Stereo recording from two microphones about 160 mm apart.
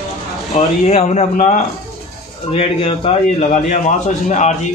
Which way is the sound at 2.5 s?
35° left (ahead or behind).